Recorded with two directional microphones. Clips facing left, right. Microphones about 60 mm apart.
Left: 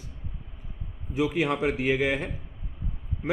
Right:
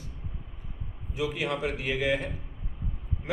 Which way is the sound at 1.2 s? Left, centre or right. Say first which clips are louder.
Left 5 dB; left.